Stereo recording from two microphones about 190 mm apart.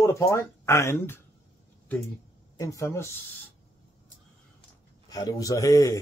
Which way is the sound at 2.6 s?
15° left (ahead or behind).